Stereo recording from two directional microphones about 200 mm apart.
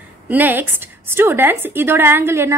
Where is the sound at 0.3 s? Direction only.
10° right (ahead or behind).